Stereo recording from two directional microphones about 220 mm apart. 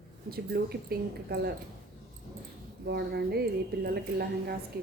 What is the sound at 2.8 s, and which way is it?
A woman's voice, 45° right (ahead or behind).